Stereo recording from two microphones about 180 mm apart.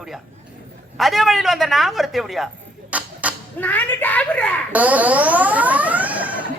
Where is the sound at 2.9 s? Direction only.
10° right (ahead or behind).